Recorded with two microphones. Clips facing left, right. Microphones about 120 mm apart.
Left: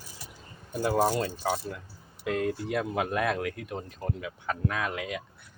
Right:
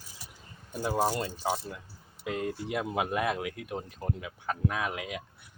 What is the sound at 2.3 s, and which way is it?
Speech, 60° left (ahead or behind).